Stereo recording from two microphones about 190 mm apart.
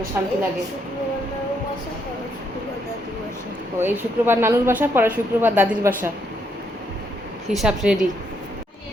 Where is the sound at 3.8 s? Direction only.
10° right (ahead or behind).